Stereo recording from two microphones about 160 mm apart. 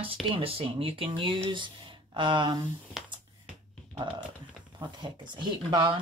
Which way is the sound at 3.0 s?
Centre (ahead or behind).